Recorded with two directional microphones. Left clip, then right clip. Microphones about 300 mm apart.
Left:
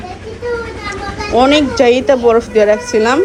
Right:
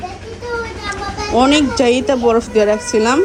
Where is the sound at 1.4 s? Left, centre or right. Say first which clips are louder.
Left 3 dB; centre.